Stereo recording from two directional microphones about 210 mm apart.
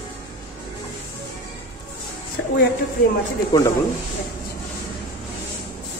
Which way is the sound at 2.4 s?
55° left (ahead or behind).